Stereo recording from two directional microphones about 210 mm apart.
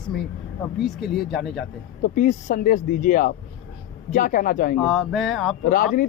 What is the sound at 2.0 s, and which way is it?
Speech, 40° left (ahead or behind).